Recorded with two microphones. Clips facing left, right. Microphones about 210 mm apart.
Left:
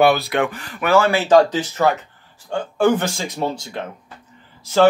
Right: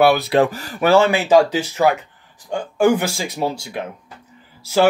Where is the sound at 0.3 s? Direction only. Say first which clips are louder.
Right 5 dB; 35° right (ahead or behind).